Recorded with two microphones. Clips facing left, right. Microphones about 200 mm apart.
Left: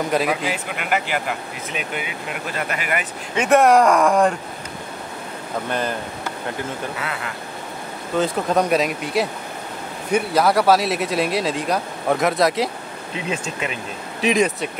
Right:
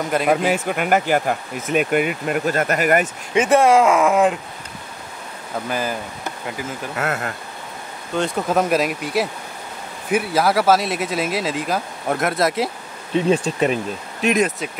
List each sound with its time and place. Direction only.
0.1 s speech: centre (ahead or behind)
0.5 s speech: 45° right (ahead or behind)
3.3 s speech: centre (ahead or behind)
5.7 s speech: 5° right (ahead or behind)
7.0 s speech: 45° right (ahead or behind)
8.2 s speech: 5° right (ahead or behind)
13.3 s speech: 35° right (ahead or behind)
14.2 s speech: centre (ahead or behind)